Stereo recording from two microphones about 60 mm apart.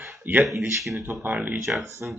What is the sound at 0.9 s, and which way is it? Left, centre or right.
Speech, right.